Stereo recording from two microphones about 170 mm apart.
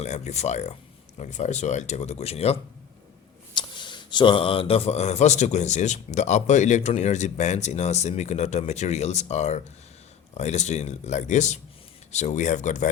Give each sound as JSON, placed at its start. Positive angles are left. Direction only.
{"t": 0.0, "sound": "speech", "side_deg": 40}